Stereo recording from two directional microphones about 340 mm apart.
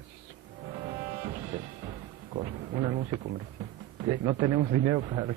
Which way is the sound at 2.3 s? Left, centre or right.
Right.